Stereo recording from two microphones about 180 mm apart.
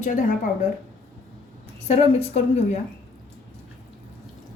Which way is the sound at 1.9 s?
35° left (ahead or behind).